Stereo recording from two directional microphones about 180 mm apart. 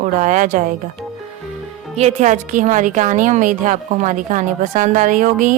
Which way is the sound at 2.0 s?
40° right (ahead or behind).